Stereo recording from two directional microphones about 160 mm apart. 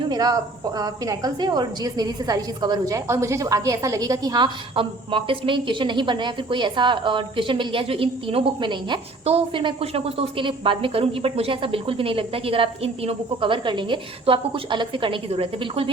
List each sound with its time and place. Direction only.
0.1 s a woman's voice: 25° right (ahead or behind)